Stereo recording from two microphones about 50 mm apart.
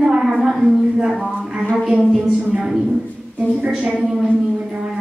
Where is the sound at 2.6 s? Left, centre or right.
Centre.